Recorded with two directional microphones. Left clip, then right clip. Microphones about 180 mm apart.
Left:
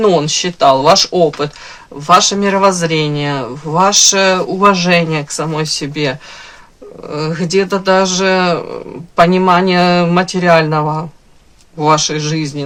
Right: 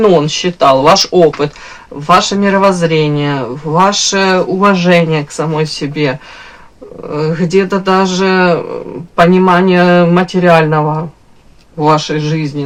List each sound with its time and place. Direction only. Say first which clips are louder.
0.0 s speech: right 3 dB; 20° left (ahead or behind)
0.9 s speech: right 3 dB; 10° left (ahead or behind)
2.0 s speech: even; 25° left (ahead or behind)